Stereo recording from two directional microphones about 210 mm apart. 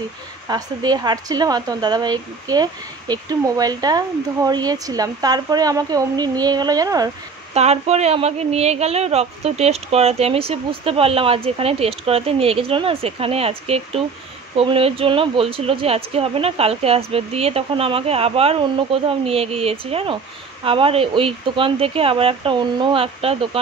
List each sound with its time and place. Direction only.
0.5 s speech: 20° right (ahead or behind)
7.5 s speech: 30° right (ahead or behind)